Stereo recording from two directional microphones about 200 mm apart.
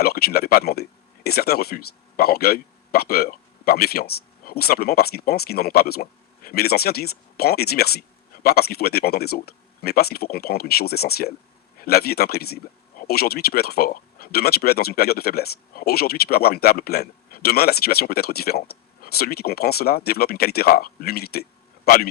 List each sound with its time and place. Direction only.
0.0 s speech: 50° left (ahead or behind)